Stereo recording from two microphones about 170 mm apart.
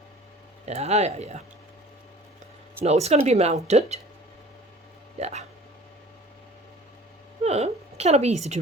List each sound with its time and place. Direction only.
0.6 s speech: 40° right (ahead or behind)
2.8 s speech: 40° right (ahead or behind)
5.2 s speech: 40° right (ahead or behind)
7.4 s a woman's voice: 40° right (ahead or behind)